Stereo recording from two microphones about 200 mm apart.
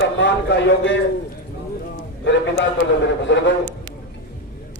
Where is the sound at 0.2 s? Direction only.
65° left (ahead or behind).